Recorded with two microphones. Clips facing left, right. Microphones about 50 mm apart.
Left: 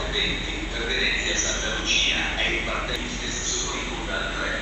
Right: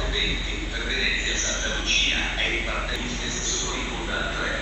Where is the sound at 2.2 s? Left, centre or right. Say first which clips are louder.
Left 1 dB; centre.